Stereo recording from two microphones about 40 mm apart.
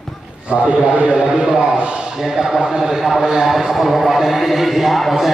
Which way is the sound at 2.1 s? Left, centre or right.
Centre.